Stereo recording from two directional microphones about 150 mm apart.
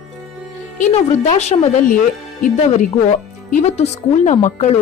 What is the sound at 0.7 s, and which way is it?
A woman's voice, 50° left (ahead or behind).